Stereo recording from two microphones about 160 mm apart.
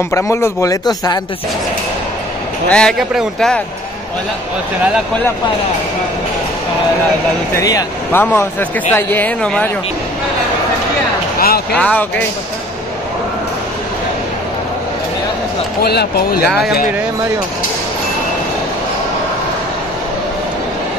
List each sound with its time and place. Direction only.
0.1 s a man's voice: 15° left (ahead or behind)
2.7 s a man's voice: 5° left (ahead or behind)
7.6 s speech: 20° left (ahead or behind)
11.3 s speech: 70° left (ahead or behind)
11.7 s speech: 10° left (ahead or behind)
15.8 s speech: 85° left